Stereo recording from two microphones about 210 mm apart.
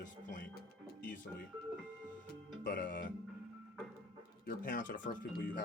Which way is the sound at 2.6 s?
40° left (ahead or behind).